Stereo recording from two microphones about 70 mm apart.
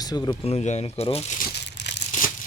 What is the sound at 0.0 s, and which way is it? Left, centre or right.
Speech, left.